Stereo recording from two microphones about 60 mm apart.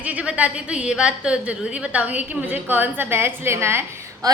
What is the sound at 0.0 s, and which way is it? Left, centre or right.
A woman's voice, right.